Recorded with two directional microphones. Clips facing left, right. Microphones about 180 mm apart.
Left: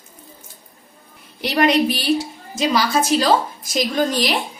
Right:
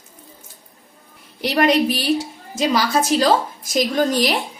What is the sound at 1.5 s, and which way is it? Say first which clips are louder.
A woman's voice: even; 40° right (ahead or behind).